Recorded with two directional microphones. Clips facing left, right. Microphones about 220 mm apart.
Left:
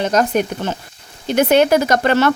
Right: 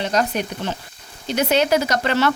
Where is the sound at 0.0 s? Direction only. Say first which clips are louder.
Left 5 dB; 45° left (ahead or behind).